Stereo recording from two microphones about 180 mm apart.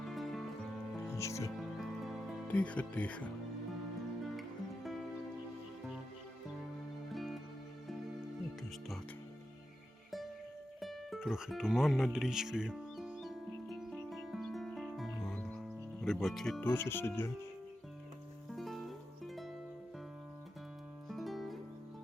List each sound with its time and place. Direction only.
0.0 s music: centre (ahead or behind)
1.1 s music: 15° left (ahead or behind)
1.5 s music: centre (ahead or behind)
4.4 s music: centre (ahead or behind)
7.1 s music: centre (ahead or behind)
10.8 s music: centre (ahead or behind)
18.5 s music: centre (ahead or behind)
21.1 s music: centre (ahead or behind)